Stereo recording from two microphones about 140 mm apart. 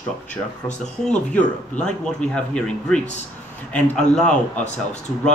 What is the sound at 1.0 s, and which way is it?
A man's voice, 5° left (ahead or behind).